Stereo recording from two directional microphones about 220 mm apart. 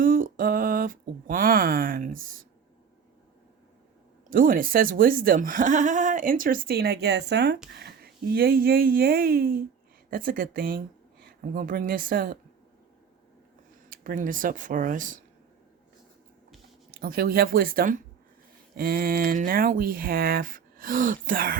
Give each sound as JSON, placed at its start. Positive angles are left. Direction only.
{"t": 0.0, "sound": "speech", "side_deg": -40}
{"t": 4.3, "sound": "speech", "side_deg": -40}
{"t": 13.9, "sound": "speech", "side_deg": -40}
{"t": 16.9, "sound": "speech", "side_deg": -40}